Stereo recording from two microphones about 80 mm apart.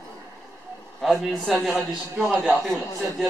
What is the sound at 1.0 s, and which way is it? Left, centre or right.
A man's voice, centre.